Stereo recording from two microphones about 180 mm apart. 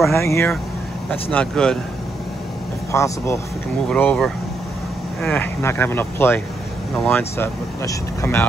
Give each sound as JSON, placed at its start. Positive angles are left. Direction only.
{"t": 0.1, "sound": "speech", "side_deg": 15}
{"t": 1.3, "sound": "speech", "side_deg": 5}
{"t": 2.9, "sound": "speech", "side_deg": 15}